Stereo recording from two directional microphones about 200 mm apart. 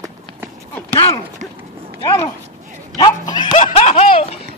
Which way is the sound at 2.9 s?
20° left (ahead or behind).